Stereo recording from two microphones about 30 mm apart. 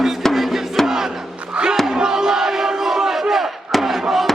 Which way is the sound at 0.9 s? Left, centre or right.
Centre.